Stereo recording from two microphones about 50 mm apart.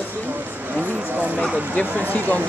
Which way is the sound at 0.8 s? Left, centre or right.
Right.